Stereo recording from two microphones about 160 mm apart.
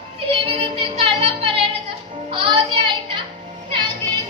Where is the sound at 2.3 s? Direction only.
30° right (ahead or behind).